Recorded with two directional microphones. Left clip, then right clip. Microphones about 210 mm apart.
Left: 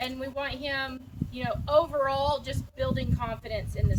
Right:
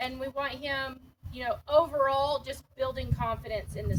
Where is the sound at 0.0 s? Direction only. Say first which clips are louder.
Even; 5° right (ahead or behind).